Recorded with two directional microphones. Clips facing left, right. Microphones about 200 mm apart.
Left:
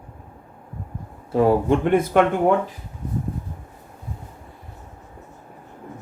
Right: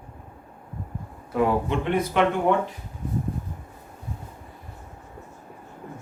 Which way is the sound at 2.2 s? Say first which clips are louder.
Left 3 dB; 50° left (ahead or behind).